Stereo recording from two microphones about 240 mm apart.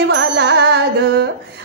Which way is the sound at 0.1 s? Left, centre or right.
Right.